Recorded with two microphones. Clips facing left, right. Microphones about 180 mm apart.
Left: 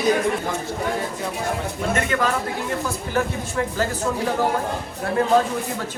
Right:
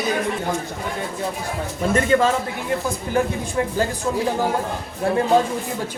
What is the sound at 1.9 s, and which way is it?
Speech, 30° right (ahead or behind).